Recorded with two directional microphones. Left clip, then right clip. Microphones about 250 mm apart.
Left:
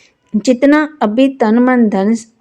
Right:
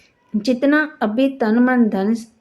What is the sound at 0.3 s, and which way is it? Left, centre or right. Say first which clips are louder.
Speech: left 6 dB; left.